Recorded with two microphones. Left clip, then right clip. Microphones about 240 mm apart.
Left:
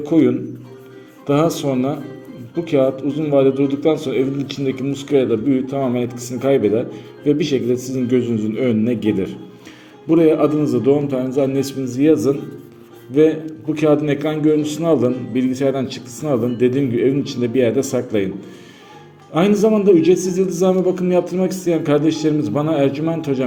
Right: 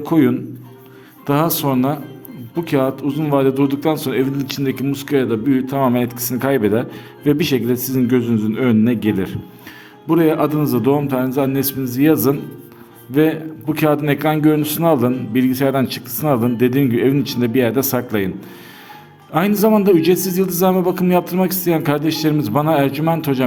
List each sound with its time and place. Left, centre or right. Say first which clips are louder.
0.0 s a man's voice: even; right
19.3 s a man's voice: even; right